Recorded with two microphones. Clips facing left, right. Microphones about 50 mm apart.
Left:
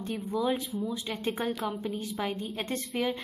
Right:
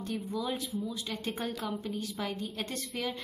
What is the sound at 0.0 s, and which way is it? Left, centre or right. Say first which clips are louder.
Speech: left 4 dB; left.